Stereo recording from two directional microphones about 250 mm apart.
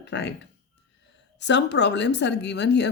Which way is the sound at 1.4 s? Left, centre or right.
Left.